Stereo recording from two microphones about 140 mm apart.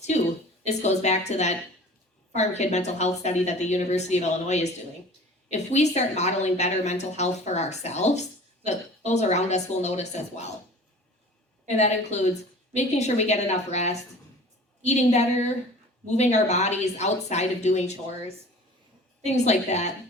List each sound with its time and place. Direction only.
0.6 s a woman's voice: 55° left (ahead or behind)
11.8 s a woman's voice: 55° left (ahead or behind)
19.2 s a woman's voice: 55° left (ahead or behind)